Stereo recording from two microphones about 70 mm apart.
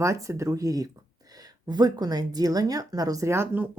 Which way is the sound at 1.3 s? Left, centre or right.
Right.